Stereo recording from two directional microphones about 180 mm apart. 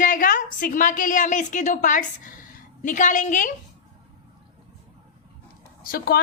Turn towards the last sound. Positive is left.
turn(degrees=55)  # may be behind; listen again after turning